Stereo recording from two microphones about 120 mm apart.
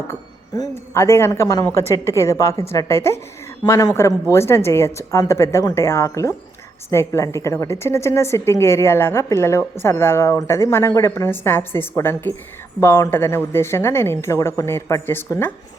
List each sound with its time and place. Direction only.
0.1 s speech: 30° left (ahead or behind)
0.9 s a woman's voice: 20° left (ahead or behind)